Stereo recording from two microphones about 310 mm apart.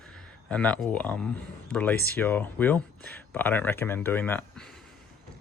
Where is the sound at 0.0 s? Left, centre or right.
Centre.